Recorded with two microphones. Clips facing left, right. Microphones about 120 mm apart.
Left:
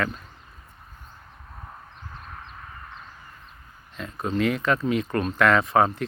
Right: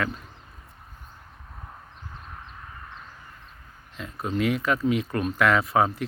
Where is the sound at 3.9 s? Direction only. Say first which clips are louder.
Left 2 dB; 5° right (ahead or behind).